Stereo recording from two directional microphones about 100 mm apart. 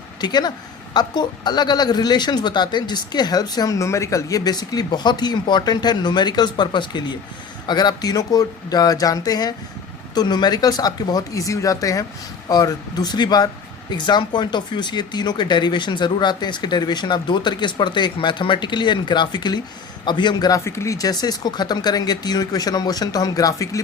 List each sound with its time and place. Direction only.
0.2 s a woman's voice: 45° left (ahead or behind)
20.5 s speech: 30° left (ahead or behind)